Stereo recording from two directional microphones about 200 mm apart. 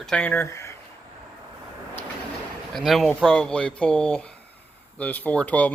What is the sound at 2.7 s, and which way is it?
Speech, centre (ahead or behind).